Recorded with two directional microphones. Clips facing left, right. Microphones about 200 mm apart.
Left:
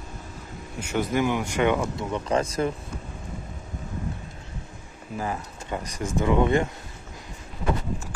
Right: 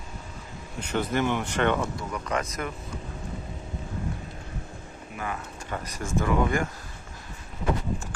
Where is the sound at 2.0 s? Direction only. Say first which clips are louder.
Left 5 dB; 25° left (ahead or behind).